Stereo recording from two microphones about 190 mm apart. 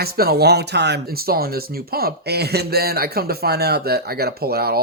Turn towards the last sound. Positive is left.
turn(degrees=-55)  # may be behind; listen again after turning